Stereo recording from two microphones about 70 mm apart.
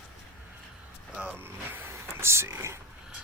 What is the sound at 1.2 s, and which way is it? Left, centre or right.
Speech, right.